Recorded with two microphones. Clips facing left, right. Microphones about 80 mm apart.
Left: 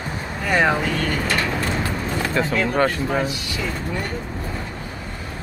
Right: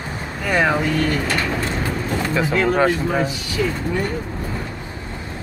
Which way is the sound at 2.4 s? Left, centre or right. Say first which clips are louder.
Right 2 dB; centre.